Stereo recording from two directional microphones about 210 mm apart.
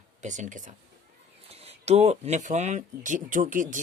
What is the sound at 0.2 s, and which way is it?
Speech, 35° right (ahead or behind).